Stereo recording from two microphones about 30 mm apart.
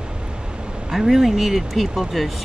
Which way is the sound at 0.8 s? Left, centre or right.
Centre.